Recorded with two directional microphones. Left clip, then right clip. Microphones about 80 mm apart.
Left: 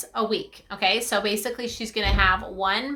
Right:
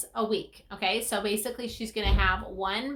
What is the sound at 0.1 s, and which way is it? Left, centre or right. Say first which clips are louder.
A woman's voice: left 4 dB; left.